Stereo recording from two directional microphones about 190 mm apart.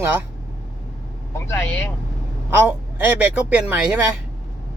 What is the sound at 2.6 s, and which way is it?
Speech, 10° right (ahead or behind).